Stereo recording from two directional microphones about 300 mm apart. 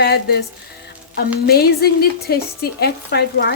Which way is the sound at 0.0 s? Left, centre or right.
Left.